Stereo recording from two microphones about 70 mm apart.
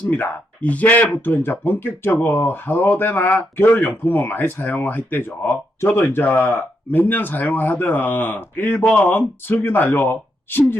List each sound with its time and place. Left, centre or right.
0.1 s speech: left